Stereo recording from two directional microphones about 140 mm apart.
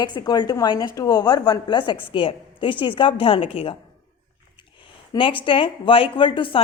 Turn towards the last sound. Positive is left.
turn(degrees=35)  # may be behind; listen again after turning